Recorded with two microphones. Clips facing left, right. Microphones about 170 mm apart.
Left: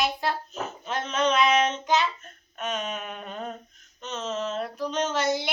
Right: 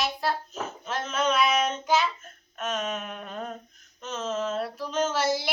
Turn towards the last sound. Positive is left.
turn(degrees=-5)  # may be behind; listen again after turning